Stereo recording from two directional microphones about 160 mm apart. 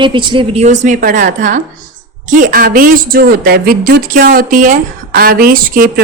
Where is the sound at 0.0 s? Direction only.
30° right (ahead or behind).